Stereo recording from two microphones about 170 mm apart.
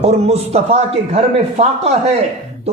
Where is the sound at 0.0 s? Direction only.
40° right (ahead or behind).